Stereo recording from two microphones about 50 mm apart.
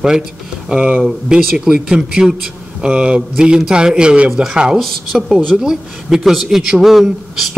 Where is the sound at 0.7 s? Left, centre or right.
Right.